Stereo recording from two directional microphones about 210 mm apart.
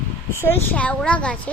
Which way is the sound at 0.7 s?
5° left (ahead or behind).